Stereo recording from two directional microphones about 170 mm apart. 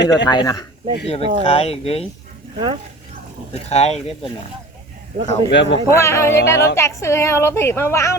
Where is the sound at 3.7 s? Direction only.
40° left (ahead or behind).